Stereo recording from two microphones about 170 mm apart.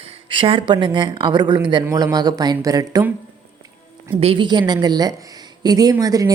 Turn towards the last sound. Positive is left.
turn(degrees=-20)  # may be behind; listen again after turning